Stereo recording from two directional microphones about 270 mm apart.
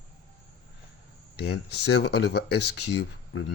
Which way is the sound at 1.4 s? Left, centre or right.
Left.